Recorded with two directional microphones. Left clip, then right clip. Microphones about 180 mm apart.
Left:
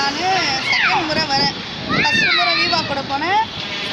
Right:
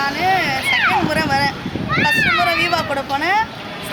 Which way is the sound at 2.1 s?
15° right (ahead or behind).